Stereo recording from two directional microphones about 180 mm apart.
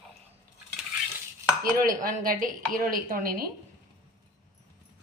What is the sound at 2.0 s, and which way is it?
A woman's voice, 50° right (ahead or behind).